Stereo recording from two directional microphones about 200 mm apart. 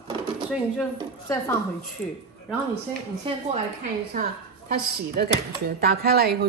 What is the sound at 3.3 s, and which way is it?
Speech, 25° right (ahead or behind).